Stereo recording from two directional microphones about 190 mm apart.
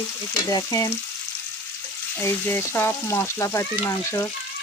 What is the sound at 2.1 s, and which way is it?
Frying, 10° left (ahead or behind).